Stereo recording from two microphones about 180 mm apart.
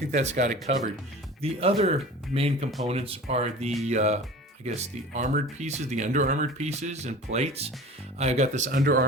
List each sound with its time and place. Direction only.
0.1 s speech: 40° right (ahead or behind)
8.7 s speech: 55° right (ahead or behind)